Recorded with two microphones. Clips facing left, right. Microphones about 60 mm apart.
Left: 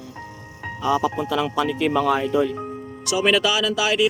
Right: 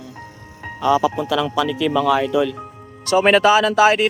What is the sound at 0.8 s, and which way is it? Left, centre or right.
Speech, right.